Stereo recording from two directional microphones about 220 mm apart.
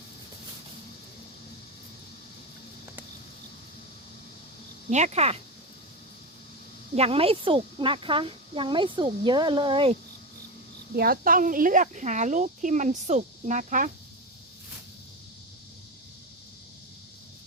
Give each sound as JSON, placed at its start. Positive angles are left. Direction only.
{"t": 4.9, "sound": "speech", "side_deg": -30}
{"t": 6.9, "sound": "speech", "side_deg": -25}
{"t": 10.9, "sound": "speech", "side_deg": -40}